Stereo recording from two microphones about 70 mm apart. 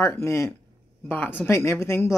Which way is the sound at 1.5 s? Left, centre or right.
Left.